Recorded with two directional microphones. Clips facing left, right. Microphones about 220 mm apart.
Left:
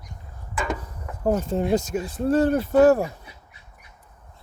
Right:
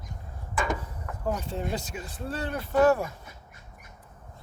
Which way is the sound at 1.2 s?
45° left (ahead or behind).